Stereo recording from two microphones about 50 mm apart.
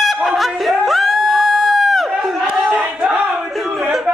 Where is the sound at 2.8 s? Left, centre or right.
Right.